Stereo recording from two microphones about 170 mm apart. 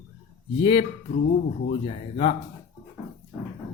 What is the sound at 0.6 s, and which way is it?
Speech, 35° left (ahead or behind).